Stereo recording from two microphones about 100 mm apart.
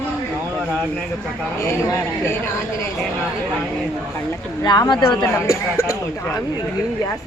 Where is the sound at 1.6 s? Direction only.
30° left (ahead or behind).